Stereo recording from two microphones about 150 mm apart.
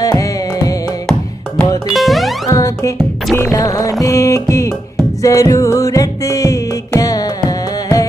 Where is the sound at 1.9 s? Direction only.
Centre (ahead or behind).